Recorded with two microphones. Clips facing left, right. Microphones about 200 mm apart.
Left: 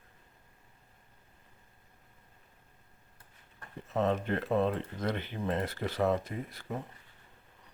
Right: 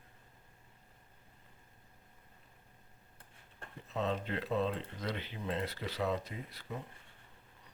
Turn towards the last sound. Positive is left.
turn(degrees=50)  # may be behind; listen again after turning